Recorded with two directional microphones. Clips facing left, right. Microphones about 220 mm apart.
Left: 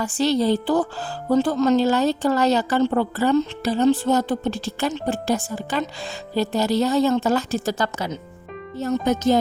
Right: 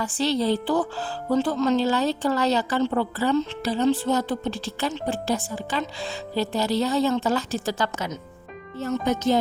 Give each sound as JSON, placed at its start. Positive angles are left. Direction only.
{"t": 0.0, "sound": "a woman's voice", "side_deg": 45}